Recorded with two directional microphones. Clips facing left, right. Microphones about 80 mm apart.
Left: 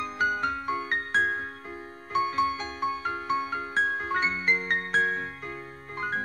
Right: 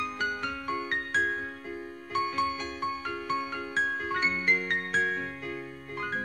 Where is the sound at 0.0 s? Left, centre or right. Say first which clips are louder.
Left 4 dB; left.